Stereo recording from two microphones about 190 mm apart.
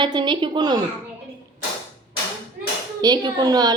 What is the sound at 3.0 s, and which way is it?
Speech, 20° right (ahead or behind).